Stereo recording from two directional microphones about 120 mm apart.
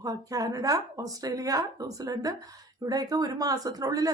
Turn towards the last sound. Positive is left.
turn(degrees=-30)  # may be behind; listen again after turning